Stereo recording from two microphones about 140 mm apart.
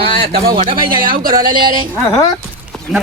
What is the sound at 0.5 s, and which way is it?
Speech, 40° right (ahead or behind).